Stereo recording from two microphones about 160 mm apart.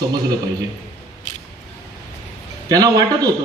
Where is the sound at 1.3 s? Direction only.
50° left (ahead or behind).